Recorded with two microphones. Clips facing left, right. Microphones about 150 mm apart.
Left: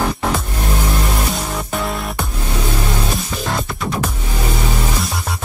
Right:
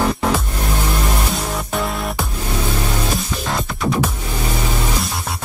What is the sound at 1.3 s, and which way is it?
Music, centre (ahead or behind).